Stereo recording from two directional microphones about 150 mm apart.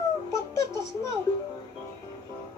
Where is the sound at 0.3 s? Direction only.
20° left (ahead or behind).